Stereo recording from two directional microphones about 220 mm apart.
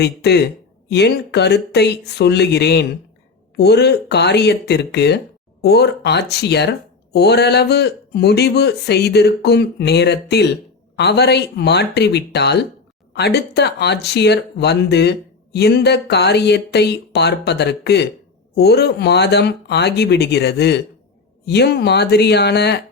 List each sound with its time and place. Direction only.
0.0 s speech: 50° left (ahead or behind)